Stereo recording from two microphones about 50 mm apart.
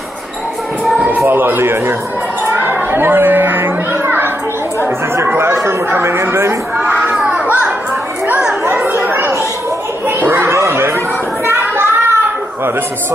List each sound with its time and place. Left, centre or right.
1.3 s a man's voice: right
2.5 s children playing: right
5.1 s speech: right
6.8 s crowd: right
9.0 s children playing: right
10.6 s a sound: right
11.4 s child singing: right